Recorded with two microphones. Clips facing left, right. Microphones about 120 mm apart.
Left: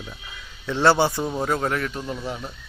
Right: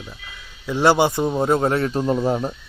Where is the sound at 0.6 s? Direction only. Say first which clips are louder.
Right 2 dB; 15° right (ahead or behind); by 2.5 s 40° right (ahead or behind).